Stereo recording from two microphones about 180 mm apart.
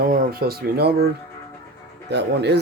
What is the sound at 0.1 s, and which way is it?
Speech, 55° right (ahead or behind).